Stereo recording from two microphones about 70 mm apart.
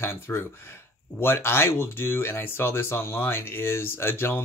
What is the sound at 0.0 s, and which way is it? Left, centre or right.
Speech, left.